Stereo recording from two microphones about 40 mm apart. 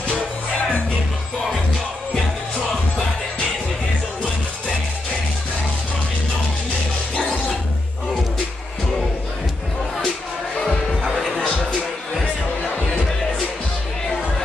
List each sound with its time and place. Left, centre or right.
11.3 s music: left